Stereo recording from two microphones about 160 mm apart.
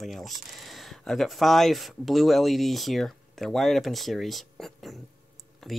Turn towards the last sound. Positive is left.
turn(degrees=0)  # may be behind; listen again after turning